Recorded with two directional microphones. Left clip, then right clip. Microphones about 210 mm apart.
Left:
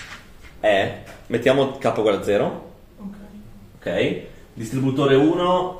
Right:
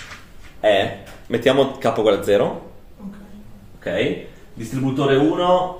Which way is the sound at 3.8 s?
5° right (ahead or behind).